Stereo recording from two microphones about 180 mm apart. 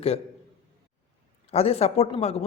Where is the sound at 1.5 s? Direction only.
35° left (ahead or behind).